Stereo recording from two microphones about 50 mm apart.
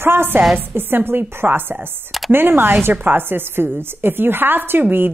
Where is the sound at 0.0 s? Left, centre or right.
Right.